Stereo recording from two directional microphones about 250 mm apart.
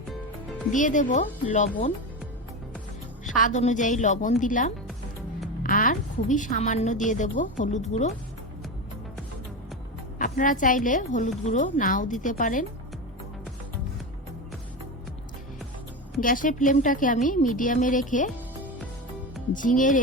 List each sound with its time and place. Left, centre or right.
0.7 s speech: left
3.2 s a woman's voice: left
10.2 s speech: left
16.2 s speech: left
19.5 s speech: left